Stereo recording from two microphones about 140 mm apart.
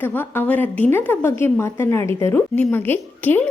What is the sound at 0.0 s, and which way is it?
A woman's voice, 15° left (ahead or behind).